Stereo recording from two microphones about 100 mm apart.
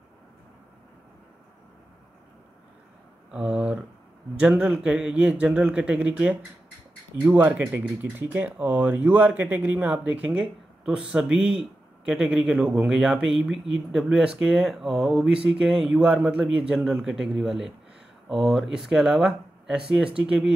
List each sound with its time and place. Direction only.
3.3 s a man's voice: 10° right (ahead or behind)